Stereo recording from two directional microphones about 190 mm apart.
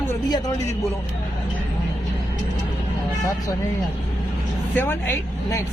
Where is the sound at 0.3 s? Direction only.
20° left (ahead or behind).